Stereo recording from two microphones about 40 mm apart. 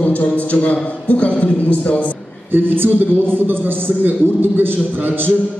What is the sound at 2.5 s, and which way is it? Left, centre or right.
A man's voice, right.